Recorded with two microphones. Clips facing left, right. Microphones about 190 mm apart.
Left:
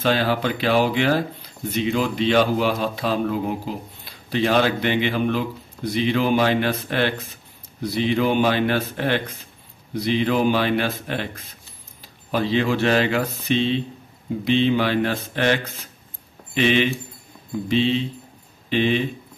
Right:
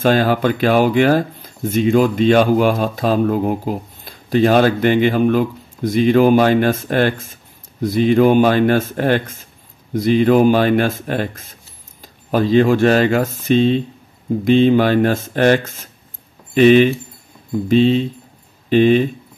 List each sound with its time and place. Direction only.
0.0 s speech: 45° right (ahead or behind)